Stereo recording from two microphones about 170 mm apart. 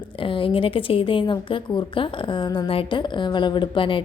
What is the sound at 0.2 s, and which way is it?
A woman's voice, 30° left (ahead or behind).